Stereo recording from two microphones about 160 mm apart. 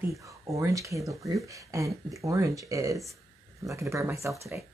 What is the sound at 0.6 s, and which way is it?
A woman's voice, 20° right (ahead or behind).